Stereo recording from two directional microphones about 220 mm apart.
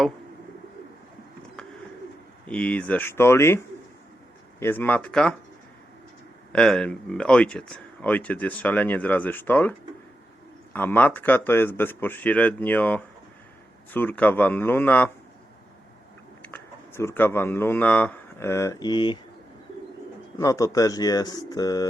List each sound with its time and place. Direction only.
2.5 s speech: 5° left (ahead or behind)
4.6 s speech: 10° left (ahead or behind)
6.5 s speech: 5° left (ahead or behind)
16.4 s speech: 10° left (ahead or behind)
20.4 s speech: 15° left (ahead or behind)